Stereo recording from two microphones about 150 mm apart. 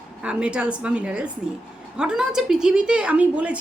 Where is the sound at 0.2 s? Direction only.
5° right (ahead or behind).